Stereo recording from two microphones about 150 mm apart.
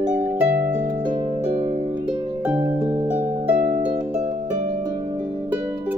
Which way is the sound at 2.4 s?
15° right (ahead or behind).